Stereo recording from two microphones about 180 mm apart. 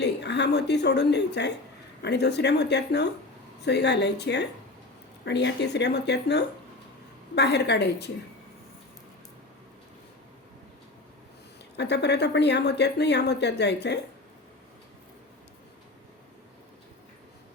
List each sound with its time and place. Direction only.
0.0 s speech: 70° left (ahead or behind)
11.8 s speech: 70° left (ahead or behind)